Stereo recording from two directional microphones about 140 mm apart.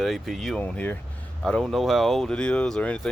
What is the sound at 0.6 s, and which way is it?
Speech, 10° left (ahead or behind).